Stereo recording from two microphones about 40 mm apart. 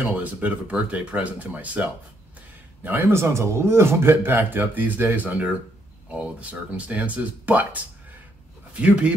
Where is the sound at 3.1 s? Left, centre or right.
Right.